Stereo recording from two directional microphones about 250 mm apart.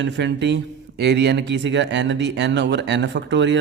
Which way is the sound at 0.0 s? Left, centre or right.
Right.